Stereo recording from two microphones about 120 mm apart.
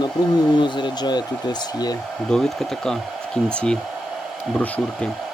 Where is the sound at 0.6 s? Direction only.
40° left (ahead or behind).